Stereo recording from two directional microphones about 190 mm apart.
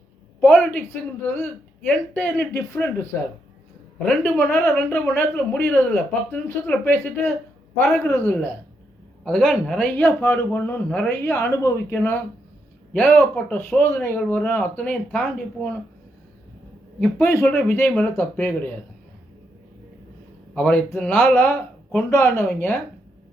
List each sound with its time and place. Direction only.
0.3 s a woman's voice: 5° left (ahead or behind)
1.9 s a man's voice: 10° left (ahead or behind)
7.8 s speech: centre (ahead or behind)
8.0 s a man's voice: 10° left (ahead or behind)
17.0 s a man's voice: 10° left (ahead or behind)
20.5 s speech: 5° left (ahead or behind)
22.1 s a man's voice: 15° left (ahead or behind)
22.4 s speech: 5° left (ahead or behind)